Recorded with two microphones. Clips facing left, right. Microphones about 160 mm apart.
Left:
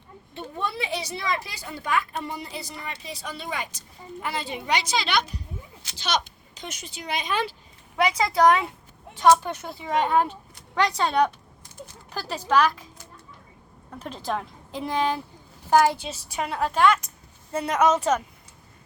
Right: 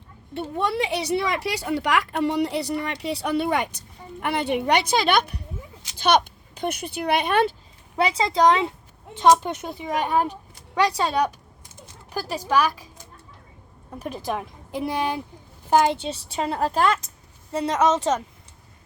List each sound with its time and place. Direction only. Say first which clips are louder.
0.3 s speech: right 6 dB; 70° right (ahead or behind)
7.9 s a woman's voice: right 1 dB; 30° right (ahead or behind); by 10.3 s 15° right (ahead or behind)
12.1 s speech: even; 15° right (ahead or behind)
14.0 s a woman's voice: right 1 dB; 15° right (ahead or behind); by 17.0 s 35° right (ahead or behind)
17.5 s a woman's voice: right 1 dB; 20° right (ahead or behind)